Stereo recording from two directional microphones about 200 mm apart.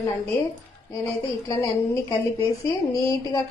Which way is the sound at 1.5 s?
15° left (ahead or behind).